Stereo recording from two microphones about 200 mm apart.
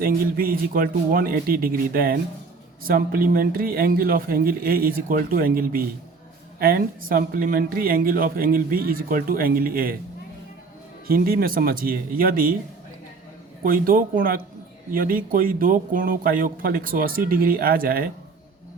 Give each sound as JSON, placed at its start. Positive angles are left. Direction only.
{"t": 0.0, "sound": "speech", "side_deg": -45}
{"t": 11.1, "sound": "speech", "side_deg": -45}
{"t": 13.6, "sound": "speech", "side_deg": -45}